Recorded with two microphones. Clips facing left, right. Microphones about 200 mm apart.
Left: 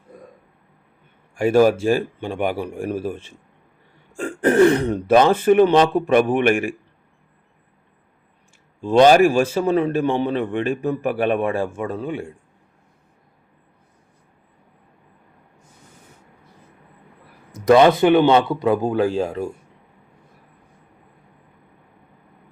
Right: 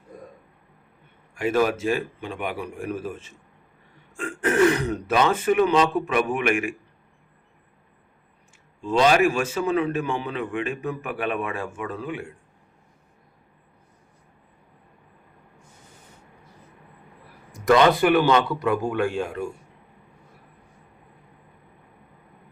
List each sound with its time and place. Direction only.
1.4 s speech: 35° left (ahead or behind)
9.0 s speech: 35° left (ahead or behind)
17.5 s a man's voice: 20° left (ahead or behind); by 19.5 s 35° left (ahead or behind)